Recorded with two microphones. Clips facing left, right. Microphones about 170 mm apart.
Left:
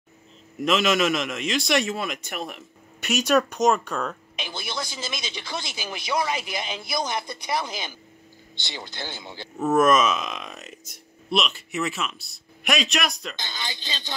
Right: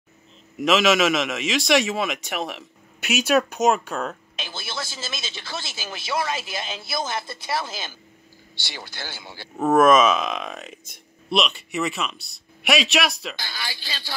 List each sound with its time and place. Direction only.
0.7 s a man's voice: 85° right
3.0 s a man's voice: 5° right (ahead or behind)
4.4 s speech: 15° left (ahead or behind)
10.1 s a man's voice: centre (ahead or behind)
13.4 s speech: 20° left (ahead or behind)